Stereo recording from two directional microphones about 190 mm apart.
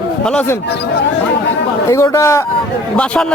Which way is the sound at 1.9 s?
15° left (ahead or behind).